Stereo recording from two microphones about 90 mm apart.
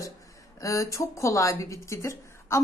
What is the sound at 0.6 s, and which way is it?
A woman's voice, 35° left (ahead or behind).